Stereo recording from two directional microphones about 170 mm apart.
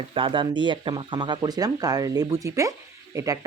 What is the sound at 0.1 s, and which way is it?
Speech, 30° right (ahead or behind).